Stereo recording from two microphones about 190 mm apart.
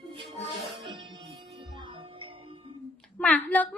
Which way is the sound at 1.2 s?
30° right (ahead or behind).